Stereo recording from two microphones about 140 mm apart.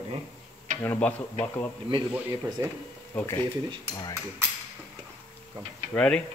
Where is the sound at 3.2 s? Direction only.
20° left (ahead or behind).